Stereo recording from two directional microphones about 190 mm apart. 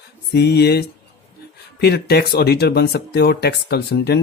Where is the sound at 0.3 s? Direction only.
60° left (ahead or behind).